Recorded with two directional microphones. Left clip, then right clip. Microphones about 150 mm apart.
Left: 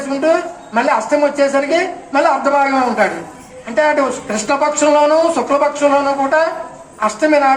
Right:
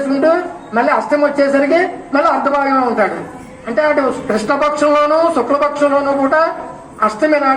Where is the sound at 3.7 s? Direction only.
15° left (ahead or behind).